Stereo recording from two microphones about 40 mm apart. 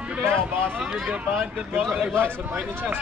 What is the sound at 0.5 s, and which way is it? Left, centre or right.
Speech, right.